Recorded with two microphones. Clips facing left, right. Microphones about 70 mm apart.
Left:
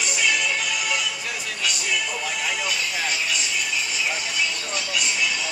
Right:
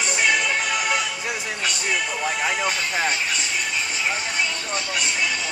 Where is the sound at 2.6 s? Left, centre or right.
Right.